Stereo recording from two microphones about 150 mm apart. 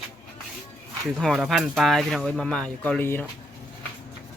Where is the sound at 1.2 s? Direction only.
Centre (ahead or behind).